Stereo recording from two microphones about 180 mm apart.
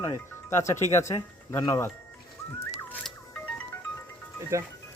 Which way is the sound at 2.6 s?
10° left (ahead or behind).